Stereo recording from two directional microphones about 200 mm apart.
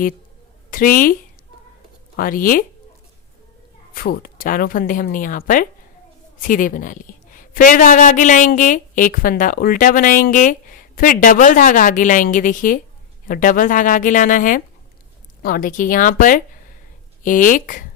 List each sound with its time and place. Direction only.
0.7 s a woman's voice: 45° left (ahead or behind)
2.1 s a woman's voice: 45° left (ahead or behind)
3.9 s a woman's voice: 45° left (ahead or behind)